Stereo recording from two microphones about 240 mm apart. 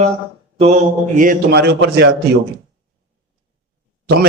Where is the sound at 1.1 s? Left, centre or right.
Right.